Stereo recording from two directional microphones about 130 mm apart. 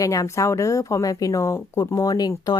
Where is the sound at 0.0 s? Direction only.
25° left (ahead or behind).